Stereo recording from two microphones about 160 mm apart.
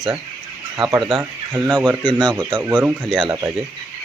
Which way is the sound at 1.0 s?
30° right (ahead or behind).